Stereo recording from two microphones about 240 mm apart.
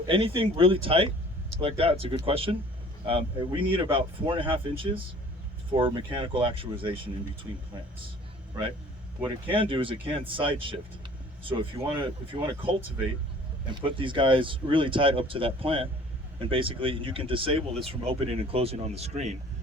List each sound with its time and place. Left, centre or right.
0.1 s speech: right
9.5 s speech: right